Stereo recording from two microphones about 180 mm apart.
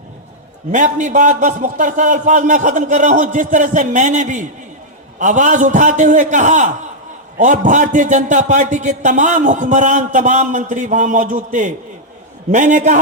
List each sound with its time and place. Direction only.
0.7 s a man's voice: 45° right (ahead or behind)